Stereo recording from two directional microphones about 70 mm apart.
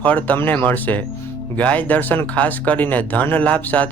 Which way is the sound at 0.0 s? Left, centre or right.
Left.